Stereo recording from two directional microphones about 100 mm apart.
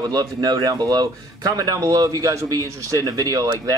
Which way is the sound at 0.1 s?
45° right (ahead or behind).